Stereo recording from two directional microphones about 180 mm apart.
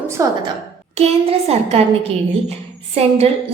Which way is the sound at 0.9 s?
35° right (ahead or behind).